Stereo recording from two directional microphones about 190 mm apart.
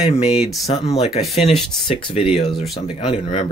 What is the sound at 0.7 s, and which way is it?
Speech, 30° left (ahead or behind).